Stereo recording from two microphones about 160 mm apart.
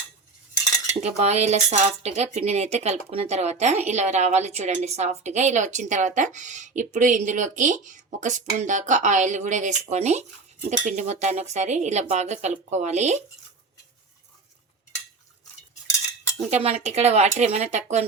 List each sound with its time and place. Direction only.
1.0 s speech: 45° right (ahead or behind)
16.6 s speech: 40° right (ahead or behind)